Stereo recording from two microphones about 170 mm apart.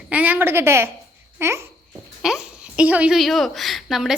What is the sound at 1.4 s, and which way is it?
Babbling, 15° right (ahead or behind).